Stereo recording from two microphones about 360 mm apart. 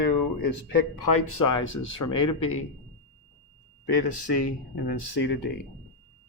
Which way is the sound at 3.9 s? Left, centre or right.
Left.